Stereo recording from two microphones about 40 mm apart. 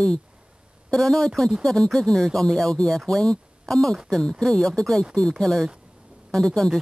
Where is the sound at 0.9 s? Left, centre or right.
Centre.